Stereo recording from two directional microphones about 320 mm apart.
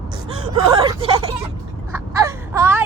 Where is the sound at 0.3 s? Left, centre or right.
Centre.